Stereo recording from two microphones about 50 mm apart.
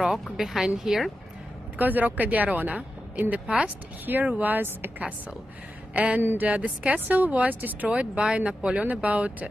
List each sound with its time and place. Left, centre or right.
0.0 s speech: centre
1.8 s a woman's voice: right
4.0 s a woman's voice: right
6.1 s a woman's voice: right
8.0 s speech: right